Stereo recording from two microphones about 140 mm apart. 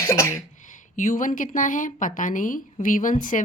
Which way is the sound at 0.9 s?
70° left (ahead or behind).